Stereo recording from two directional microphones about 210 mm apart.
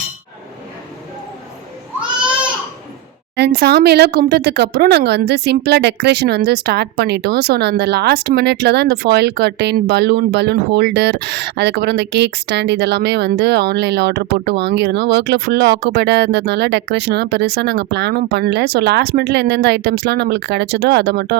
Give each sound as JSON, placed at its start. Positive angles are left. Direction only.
{"t": 3.3, "sound": "speech", "side_deg": -50}